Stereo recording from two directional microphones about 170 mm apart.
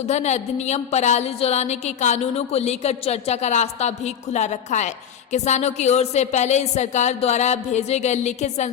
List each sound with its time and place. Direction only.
0.1 s a woman's voice: 40° left (ahead or behind)